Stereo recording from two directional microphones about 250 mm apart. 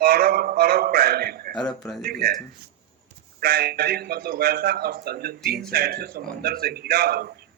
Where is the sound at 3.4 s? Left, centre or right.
Right.